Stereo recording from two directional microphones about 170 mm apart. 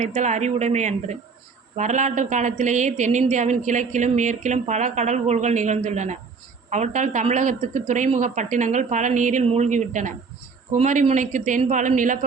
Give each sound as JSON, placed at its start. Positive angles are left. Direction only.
{"t": 0.0, "sound": "a woman's voice", "side_deg": -45}